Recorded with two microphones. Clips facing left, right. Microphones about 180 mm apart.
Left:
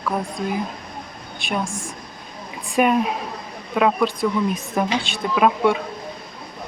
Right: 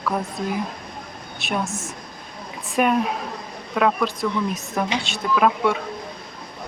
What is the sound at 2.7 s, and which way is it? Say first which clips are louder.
Speech: left 2 dB; 5° left (ahead or behind).